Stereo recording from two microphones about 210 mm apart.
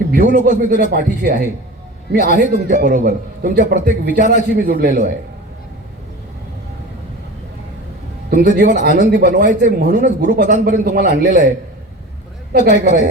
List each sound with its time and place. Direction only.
0.1 s a man's voice: 45° right (ahead or behind)
8.3 s a man's voice: 45° right (ahead or behind)
12.6 s a man's voice: 50° right (ahead or behind)